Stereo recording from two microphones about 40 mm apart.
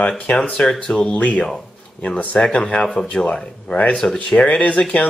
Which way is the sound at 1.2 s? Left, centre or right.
Left.